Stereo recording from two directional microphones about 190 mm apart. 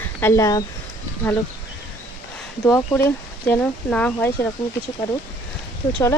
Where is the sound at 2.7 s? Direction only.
15° left (ahead or behind).